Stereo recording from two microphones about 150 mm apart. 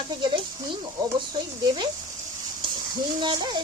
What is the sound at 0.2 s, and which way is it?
Speech, 35° right (ahead or behind).